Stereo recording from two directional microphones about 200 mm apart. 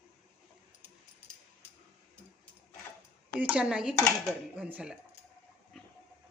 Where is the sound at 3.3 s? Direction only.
5° right (ahead or behind).